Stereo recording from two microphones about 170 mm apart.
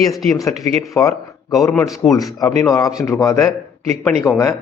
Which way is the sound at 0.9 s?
5° left (ahead or behind).